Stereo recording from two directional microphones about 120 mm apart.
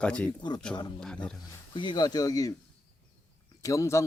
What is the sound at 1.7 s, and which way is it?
Speech, 40° left (ahead or behind).